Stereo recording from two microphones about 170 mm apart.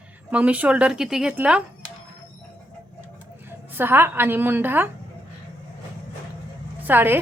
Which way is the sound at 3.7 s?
15° right (ahead or behind).